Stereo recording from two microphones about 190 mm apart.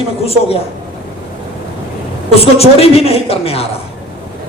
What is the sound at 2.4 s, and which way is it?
A man's voice, 30° left (ahead or behind).